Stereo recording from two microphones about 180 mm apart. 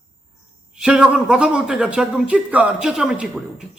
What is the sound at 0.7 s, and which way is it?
A man's voice, 5° right (ahead or behind).